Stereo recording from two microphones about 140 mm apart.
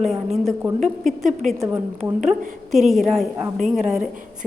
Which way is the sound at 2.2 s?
Centre (ahead or behind).